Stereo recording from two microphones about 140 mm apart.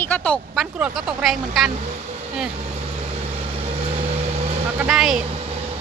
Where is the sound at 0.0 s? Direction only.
15° left (ahead or behind).